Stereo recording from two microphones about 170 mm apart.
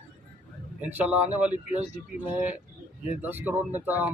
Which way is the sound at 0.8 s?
10° right (ahead or behind).